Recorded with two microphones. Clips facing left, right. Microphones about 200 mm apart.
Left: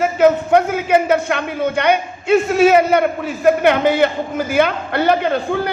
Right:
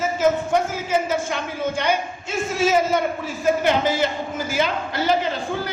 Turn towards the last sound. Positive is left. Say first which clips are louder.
# left 7 dB
turn(degrees=60)  # may be behind; listen again after turning